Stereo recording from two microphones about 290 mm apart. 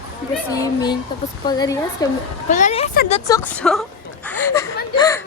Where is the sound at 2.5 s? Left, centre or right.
Left.